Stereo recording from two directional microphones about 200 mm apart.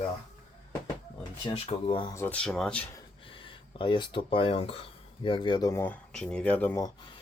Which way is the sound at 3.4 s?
25° left (ahead or behind).